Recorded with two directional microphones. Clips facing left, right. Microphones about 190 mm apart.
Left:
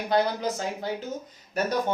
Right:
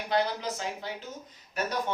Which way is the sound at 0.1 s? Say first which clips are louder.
Left 4 dB; 45° left (ahead or behind).